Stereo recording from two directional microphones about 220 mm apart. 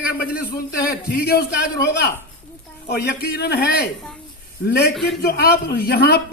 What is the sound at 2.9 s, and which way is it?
Speech, 50° left (ahead or behind).